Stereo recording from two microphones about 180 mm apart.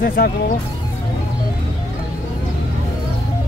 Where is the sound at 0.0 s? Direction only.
55° left (ahead or behind).